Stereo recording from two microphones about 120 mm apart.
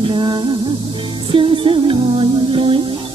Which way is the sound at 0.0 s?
45° right (ahead or behind).